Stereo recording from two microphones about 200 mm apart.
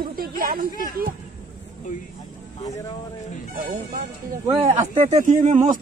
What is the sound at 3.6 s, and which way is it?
Speech, 40° right (ahead or behind).